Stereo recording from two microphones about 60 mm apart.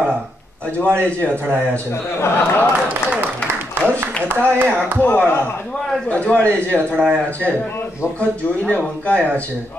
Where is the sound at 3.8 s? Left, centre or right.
Right.